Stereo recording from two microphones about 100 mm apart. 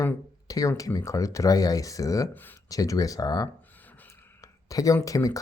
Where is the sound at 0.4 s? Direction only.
35° left (ahead or behind).